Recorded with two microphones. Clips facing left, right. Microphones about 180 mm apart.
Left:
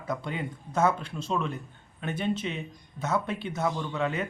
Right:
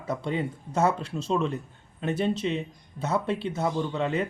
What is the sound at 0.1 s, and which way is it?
Speech, 30° right (ahead or behind).